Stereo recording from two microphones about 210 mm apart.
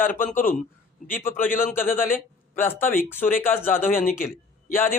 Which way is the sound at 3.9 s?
40° left (ahead or behind).